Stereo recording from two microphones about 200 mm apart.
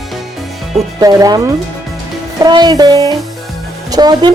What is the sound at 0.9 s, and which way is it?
A woman's voice, 20° right (ahead or behind).